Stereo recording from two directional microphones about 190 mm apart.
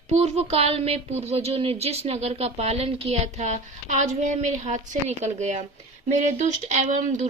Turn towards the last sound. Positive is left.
turn(degrees=-40)  # may be behind; listen again after turning